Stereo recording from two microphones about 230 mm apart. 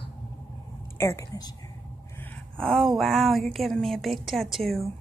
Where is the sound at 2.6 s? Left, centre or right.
Centre.